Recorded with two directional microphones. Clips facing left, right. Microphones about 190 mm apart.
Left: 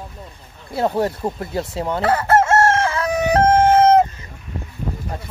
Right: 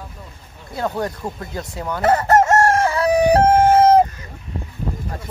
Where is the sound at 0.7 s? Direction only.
25° left (ahead or behind).